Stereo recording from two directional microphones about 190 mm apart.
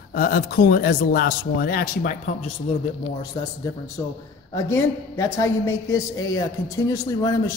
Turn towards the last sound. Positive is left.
turn(degrees=20)  # may be behind; listen again after turning